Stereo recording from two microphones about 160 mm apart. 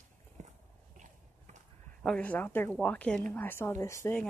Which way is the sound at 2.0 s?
5° left (ahead or behind).